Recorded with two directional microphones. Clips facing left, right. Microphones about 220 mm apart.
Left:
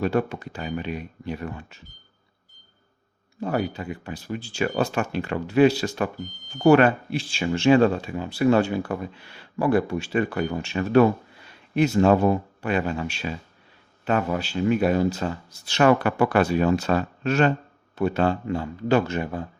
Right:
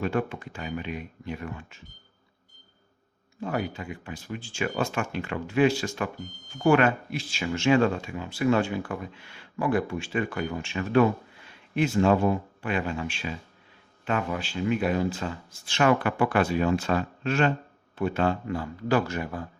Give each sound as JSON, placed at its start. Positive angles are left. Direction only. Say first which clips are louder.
{"t": 0.0, "sound": "speech", "louder": "left 4 dB", "side_deg": 40}
{"t": 3.4, "sound": "speech", "louder": "left 4 dB", "side_deg": 35}